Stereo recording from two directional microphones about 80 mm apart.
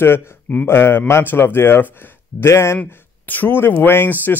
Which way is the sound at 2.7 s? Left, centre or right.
Left.